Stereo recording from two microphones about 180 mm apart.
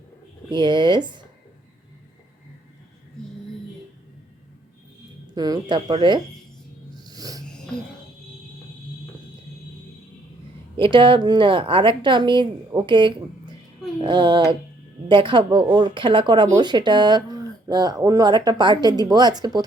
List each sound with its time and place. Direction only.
0.5 s speech: 25° right (ahead or behind)
5.3 s speech: 20° right (ahead or behind)
7.0 s a sound: 20° right (ahead or behind)
10.8 s speech: 30° right (ahead or behind)